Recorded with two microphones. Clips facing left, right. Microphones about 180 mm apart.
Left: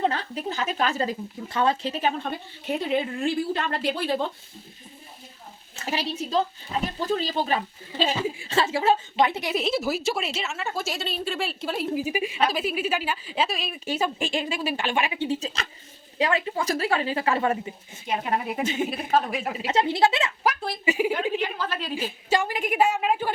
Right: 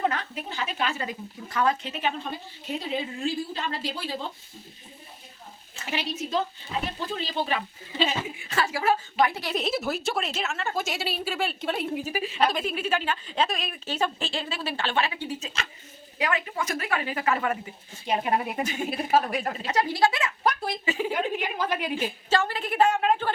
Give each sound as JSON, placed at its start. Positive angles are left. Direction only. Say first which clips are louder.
{"t": 0.0, "sound": "a woman's voice", "louder": "left 2 dB", "side_deg": 30}
{"t": 2.6, "sound": "a woman's voice", "louder": "left 5 dB", "side_deg": 60}
{"t": 5.8, "sound": "a woman's voice", "louder": "left 2 dB", "side_deg": 35}
{"t": 9.5, "sound": "a woman's voice", "louder": "left 2 dB", "side_deg": 0}
{"t": 12.0, "sound": "a woman's voice", "louder": "left 1 dB", "side_deg": 15}
{"t": 15.4, "sound": "a woman's voice", "louder": "left 3 dB", "side_deg": 35}
{"t": 18.6, "sound": "a woman's voice", "louder": "left 4 dB", "side_deg": 25}
{"t": 18.9, "sound": "a woman's voice", "louder": "even", "side_deg": -5}
{"t": 19.7, "sound": "a woman's voice", "louder": "left 2 dB", "side_deg": 25}
{"t": 21.3, "sound": "a woman's voice", "louder": "even", "side_deg": -15}
{"t": 22.3, "sound": "a woman's voice", "louder": "left 2 dB", "side_deg": 15}